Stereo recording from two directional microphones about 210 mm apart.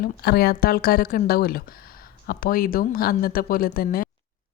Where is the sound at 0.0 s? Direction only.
50° left (ahead or behind).